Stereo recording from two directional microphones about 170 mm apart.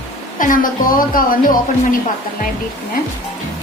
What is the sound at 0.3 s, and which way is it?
Speech, 50° left (ahead or behind).